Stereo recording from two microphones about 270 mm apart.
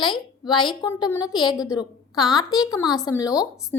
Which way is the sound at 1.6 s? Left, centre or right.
Centre.